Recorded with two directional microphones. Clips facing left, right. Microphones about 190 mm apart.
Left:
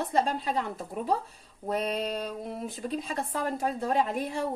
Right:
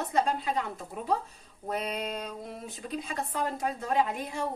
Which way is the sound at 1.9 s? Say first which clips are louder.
Left 3 dB; 30° left (ahead or behind).